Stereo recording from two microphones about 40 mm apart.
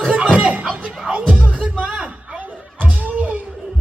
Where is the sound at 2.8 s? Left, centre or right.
Right.